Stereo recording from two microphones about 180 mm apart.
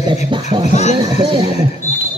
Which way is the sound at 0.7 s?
40° left (ahead or behind).